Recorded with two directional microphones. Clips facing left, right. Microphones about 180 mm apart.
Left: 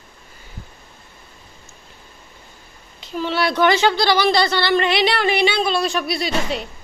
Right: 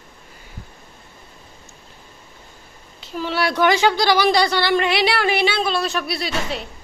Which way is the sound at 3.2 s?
5° right (ahead or behind).